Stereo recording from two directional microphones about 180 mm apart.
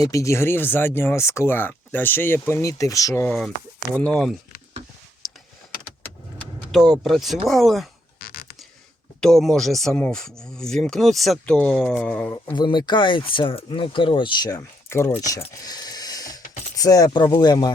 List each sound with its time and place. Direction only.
0.0 s speech: 15° left (ahead or behind)
6.7 s speech: centre (ahead or behind)
8.2 s a sound: 55° left (ahead or behind)
9.2 s speech: centre (ahead or behind)
12.5 s speech: 25° left (ahead or behind)
15.2 s a sound: 20° left (ahead or behind)
16.7 s speech: 20° left (ahead or behind)